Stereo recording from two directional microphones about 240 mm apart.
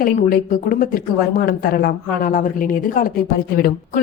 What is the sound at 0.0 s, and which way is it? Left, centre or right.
Speech, left.